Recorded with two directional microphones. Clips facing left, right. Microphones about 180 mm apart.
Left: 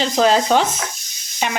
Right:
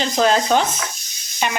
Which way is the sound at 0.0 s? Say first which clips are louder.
Left 2 dB; 30° left (ahead or behind).